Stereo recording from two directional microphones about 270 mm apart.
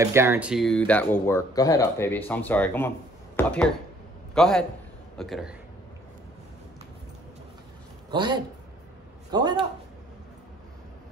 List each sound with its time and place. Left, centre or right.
0.0 s a man's voice: centre
8.1 s speech: centre